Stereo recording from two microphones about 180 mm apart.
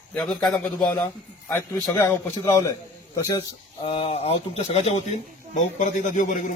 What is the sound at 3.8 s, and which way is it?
A man's voice, 30° left (ahead or behind).